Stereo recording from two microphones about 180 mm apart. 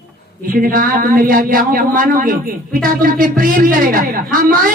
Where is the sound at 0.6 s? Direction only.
50° right (ahead or behind).